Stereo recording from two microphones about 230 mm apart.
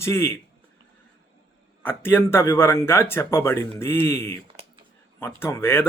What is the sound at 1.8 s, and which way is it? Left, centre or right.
Speech, centre.